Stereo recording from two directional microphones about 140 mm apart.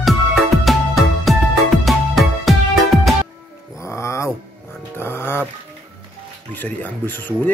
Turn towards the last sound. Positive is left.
turn(degrees=15)  # may be behind; listen again after turning